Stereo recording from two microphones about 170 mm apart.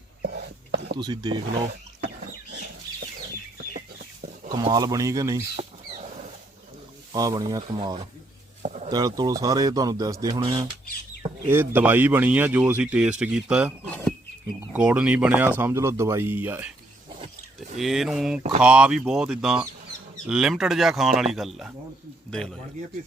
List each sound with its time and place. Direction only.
0.2 s whispering: 75° right (ahead or behind)
0.9 s speech: 25° right (ahead or behind)
4.5 s speech: 25° right (ahead or behind)
7.1 s speech: 20° right (ahead or behind)
8.6 s a sound: 40° right (ahead or behind)
8.9 s speech: 20° right (ahead or behind)
11.4 s speech: 10° right (ahead or behind)
17.7 s speech: centre (ahead or behind)